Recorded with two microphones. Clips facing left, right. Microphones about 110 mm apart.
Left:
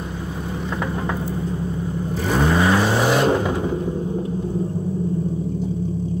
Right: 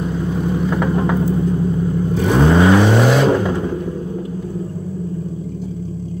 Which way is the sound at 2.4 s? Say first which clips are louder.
Right 6 dB; 20° right (ahead or behind).